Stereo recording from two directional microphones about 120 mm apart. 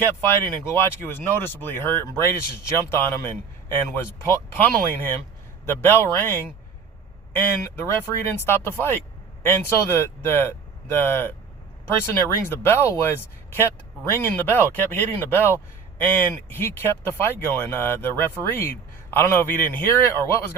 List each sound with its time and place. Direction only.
0.0 s a man's voice: 20° left (ahead or behind)